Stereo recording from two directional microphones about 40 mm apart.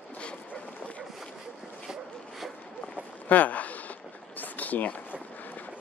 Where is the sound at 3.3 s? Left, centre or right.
Left.